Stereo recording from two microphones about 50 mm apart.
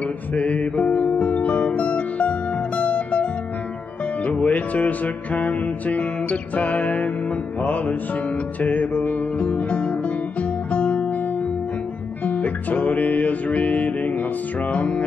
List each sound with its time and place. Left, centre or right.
0.3 s music: left
4.3 s music: left
12.3 s music: left